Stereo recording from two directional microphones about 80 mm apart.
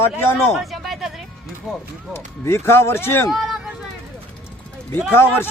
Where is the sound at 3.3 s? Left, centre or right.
Centre.